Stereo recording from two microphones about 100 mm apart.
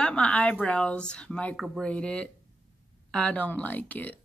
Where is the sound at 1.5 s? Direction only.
10° right (ahead or behind).